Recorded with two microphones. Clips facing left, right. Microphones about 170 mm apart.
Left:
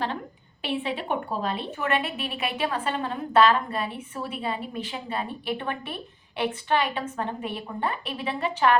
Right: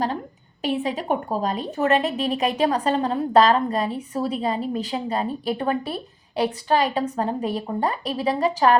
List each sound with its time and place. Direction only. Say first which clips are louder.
0.6 s a woman's voice: right 4 dB; 40° right (ahead or behind)